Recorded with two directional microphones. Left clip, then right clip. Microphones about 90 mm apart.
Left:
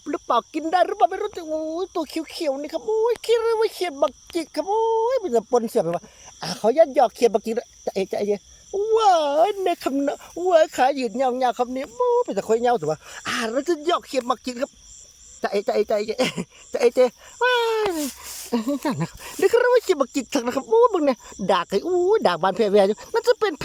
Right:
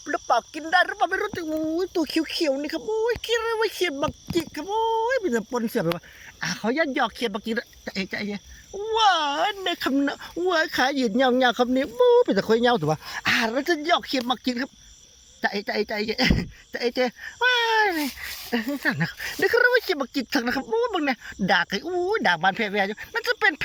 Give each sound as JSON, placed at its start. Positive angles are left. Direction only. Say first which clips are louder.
{"t": 0.0, "sound": "speech", "louder": "left 1 dB", "side_deg": 45}
{"t": 6.4, "sound": "speech", "louder": "left 7 dB", "side_deg": 65}
{"t": 8.9, "sound": "speech", "louder": "left 3 dB", "side_deg": 75}
{"t": 10.5, "sound": "speech", "louder": "left 6 dB", "side_deg": 40}
{"t": 18.5, "sound": "speech", "louder": "left 1 dB", "side_deg": 45}